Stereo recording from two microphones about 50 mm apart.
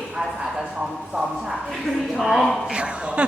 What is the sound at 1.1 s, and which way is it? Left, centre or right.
Speech, centre.